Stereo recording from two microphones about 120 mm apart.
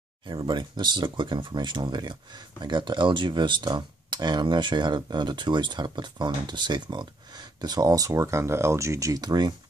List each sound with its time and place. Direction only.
0.3 s speech: 40° right (ahead or behind)